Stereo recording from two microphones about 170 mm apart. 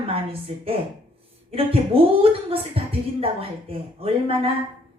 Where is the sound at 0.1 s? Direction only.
35° right (ahead or behind).